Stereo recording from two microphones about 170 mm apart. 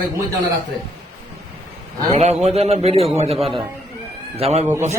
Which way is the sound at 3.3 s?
Centre (ahead or behind).